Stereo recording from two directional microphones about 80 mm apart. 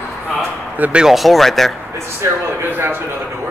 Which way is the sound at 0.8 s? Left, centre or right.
Centre.